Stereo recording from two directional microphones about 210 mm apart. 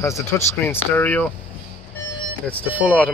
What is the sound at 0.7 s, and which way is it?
Speech, 10° left (ahead or behind).